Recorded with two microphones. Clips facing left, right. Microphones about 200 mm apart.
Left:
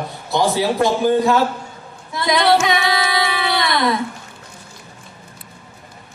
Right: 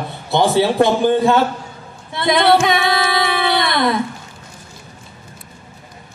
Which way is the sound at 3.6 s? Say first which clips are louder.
Left 1 dB; 25° right (ahead or behind).